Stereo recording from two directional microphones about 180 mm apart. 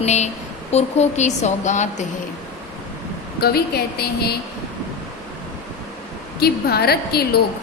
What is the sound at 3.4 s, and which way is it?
A woman's voice, 60° left (ahead or behind).